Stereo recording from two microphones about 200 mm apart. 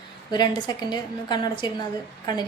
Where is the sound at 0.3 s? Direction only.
20° left (ahead or behind).